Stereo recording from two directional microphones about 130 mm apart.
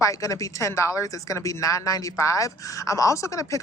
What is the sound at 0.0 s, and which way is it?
A woman's voice, 25° left (ahead or behind).